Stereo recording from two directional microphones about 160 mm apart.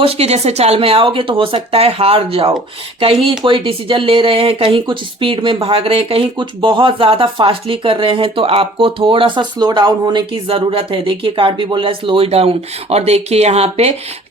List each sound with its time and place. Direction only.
0.0 s speech: 40° right (ahead or behind)